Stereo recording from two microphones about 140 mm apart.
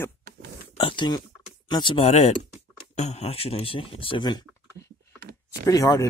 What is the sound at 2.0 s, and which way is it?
Speech, 50° left (ahead or behind).